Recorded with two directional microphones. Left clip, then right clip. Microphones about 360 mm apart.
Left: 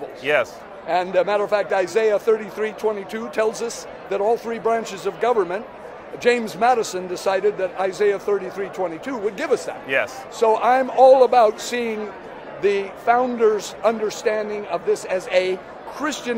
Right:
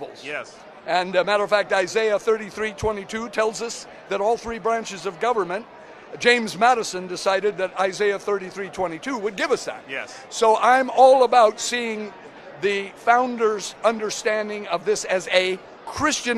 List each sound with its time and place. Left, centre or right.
0.2 s speech: centre
0.8 s a man's voice: right